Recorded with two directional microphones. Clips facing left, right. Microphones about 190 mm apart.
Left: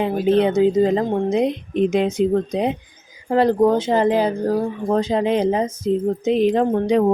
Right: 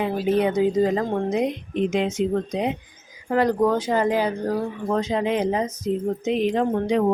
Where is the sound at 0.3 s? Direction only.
30° left (ahead or behind).